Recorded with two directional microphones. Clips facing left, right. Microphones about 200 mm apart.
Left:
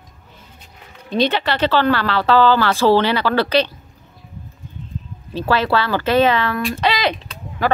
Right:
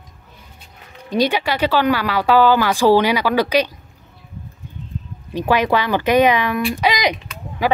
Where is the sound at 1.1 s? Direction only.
10° right (ahead or behind).